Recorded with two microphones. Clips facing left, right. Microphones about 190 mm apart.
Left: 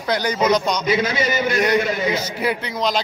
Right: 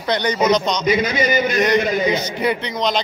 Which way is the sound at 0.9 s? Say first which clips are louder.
Right 4 dB; 15° right (ahead or behind).